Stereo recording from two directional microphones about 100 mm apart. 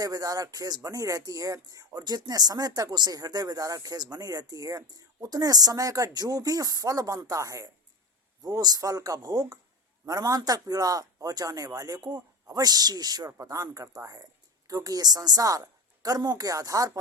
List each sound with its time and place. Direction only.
0.0 s speech: 35° right (ahead or behind)